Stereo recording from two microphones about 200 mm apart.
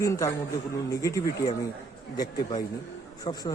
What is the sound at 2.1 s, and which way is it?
A man's voice, 20° left (ahead or behind).